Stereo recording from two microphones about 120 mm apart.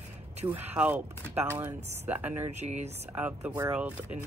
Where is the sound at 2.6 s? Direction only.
70° right (ahead or behind).